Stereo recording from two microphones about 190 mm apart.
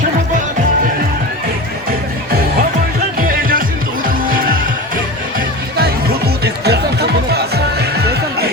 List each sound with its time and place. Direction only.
3.2 s music: 45° right (ahead or behind)
5.7 s music: 55° right (ahead or behind)